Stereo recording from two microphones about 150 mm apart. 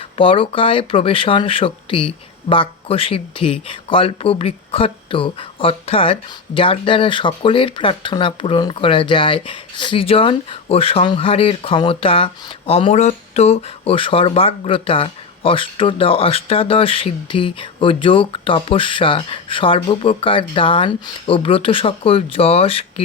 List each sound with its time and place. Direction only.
0.2 s speech: 35° left (ahead or behind)